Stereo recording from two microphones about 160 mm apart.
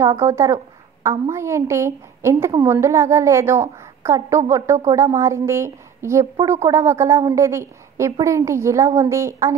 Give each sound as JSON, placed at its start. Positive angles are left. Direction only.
{"t": 0.0, "sound": "a woman's voice", "side_deg": -15}